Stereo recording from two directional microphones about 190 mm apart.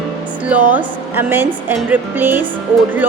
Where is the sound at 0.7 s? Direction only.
10° right (ahead or behind).